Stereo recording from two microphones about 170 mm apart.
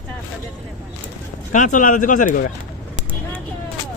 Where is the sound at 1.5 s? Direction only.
50° left (ahead or behind).